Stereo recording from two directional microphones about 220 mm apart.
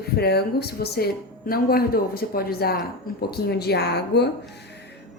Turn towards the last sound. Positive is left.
turn(degrees=50)  # may be behind; listen again after turning